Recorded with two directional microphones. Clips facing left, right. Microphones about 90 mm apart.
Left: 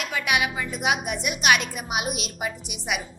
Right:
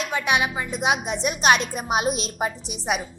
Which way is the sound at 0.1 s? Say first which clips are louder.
Right 1 dB; 30° right (ahead or behind).